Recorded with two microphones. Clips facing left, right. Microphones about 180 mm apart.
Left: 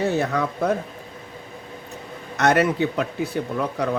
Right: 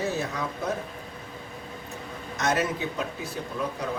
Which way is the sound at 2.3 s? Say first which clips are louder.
Left 8 dB; 65° left (ahead or behind).